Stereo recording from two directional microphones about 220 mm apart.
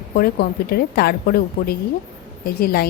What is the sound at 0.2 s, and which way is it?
A woman's voice, 45° left (ahead or behind).